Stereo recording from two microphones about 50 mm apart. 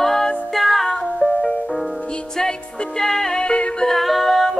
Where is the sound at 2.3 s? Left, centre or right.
Centre.